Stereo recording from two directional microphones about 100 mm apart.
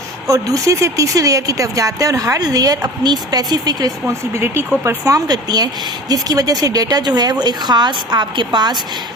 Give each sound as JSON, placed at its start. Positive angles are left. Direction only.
{"t": 0.3, "sound": "speech", "side_deg": -35}
{"t": 4.0, "sound": "a woman's voice", "side_deg": -25}